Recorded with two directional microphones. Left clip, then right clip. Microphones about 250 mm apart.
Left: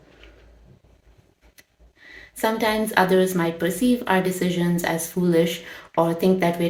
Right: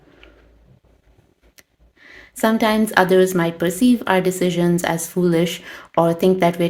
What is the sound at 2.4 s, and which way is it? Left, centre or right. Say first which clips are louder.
Speech: right 4 dB; right.